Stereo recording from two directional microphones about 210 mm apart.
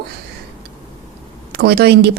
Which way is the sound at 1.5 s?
50° right (ahead or behind).